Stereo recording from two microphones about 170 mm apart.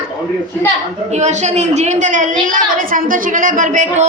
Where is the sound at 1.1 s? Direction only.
40° right (ahead or behind).